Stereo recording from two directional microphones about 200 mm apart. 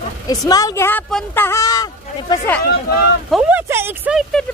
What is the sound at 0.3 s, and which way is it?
A woman's voice, 20° left (ahead or behind).